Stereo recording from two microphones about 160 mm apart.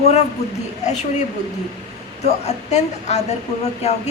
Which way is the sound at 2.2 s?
45° left (ahead or behind).